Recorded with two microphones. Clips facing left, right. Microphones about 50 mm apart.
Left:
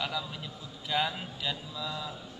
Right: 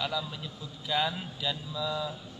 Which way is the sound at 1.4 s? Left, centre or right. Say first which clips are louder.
Right 3 dB; left.